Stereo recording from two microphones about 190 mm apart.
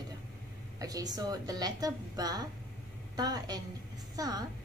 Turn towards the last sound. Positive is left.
turn(degrees=-20)  # may be behind; listen again after turning